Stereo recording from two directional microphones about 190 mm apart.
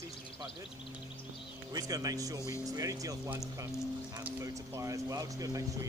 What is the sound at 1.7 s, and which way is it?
Speech, 20° right (ahead or behind).